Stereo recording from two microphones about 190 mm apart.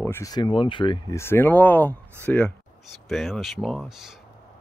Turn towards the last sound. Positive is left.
turn(degrees=0)  # may be behind; listen again after turning